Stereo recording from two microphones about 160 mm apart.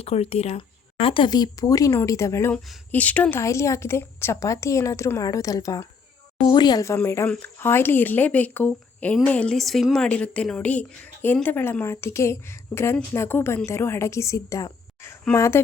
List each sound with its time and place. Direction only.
0.0 s speech: 40° left (ahead or behind); by 15.6 s 15° left (ahead or behind)